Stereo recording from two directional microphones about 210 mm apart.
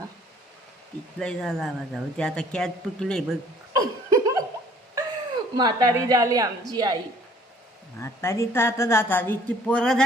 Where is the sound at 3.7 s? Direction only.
15° right (ahead or behind).